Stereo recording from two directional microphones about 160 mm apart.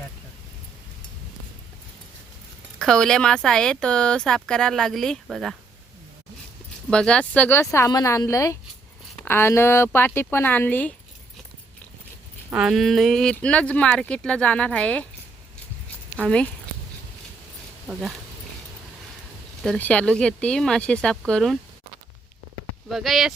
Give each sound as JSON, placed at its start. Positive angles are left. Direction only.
{"t": 2.7, "sound": "speech", "side_deg": 5}
{"t": 6.9, "sound": "speech", "side_deg": 5}
{"t": 12.5, "sound": "speech", "side_deg": -5}
{"t": 16.2, "sound": "speech", "side_deg": 5}
{"t": 17.8, "sound": "speech", "side_deg": 0}
{"t": 19.6, "sound": "speech", "side_deg": 5}
{"t": 22.9, "sound": "speech", "side_deg": 0}